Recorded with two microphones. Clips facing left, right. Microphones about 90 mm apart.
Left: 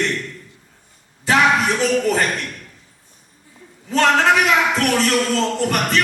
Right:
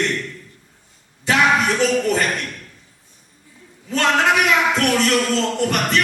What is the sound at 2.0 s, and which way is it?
Music, 30° left (ahead or behind).